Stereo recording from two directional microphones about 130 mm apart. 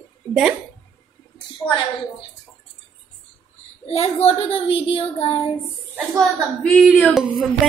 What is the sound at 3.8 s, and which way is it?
Speech, 50° left (ahead or behind).